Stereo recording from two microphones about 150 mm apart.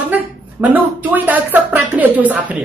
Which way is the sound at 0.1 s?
10° right (ahead or behind).